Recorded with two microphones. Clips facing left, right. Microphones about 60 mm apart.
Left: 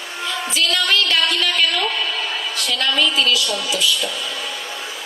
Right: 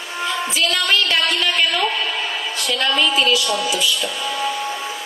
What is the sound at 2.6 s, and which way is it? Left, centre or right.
A woman's voice, right.